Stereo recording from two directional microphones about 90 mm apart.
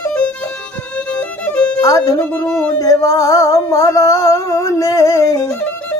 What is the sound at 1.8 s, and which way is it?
Music, 40° left (ahead or behind).